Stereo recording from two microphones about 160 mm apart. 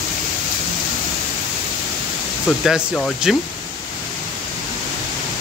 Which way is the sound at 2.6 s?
Centre (ahead or behind).